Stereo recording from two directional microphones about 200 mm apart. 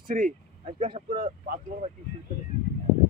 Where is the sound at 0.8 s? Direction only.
25° right (ahead or behind).